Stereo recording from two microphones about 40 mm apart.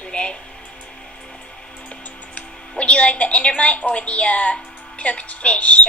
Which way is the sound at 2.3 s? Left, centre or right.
Left.